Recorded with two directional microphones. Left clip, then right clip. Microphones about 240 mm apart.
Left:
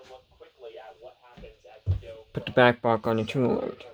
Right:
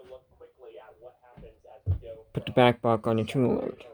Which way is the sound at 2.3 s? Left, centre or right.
Centre.